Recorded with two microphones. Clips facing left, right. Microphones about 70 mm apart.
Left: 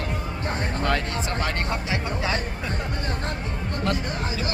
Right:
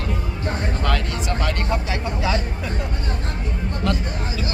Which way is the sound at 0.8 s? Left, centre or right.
Left.